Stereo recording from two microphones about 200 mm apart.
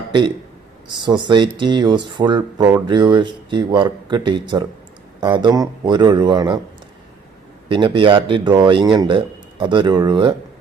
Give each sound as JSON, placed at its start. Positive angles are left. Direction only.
{"t": 0.1, "sound": "speech", "side_deg": -20}
{"t": 7.7, "sound": "speech", "side_deg": -25}